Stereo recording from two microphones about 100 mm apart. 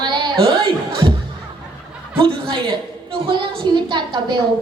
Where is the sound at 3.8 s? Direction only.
55° right (ahead or behind).